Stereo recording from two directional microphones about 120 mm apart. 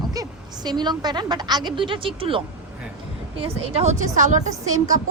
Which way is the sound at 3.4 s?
60° right (ahead or behind).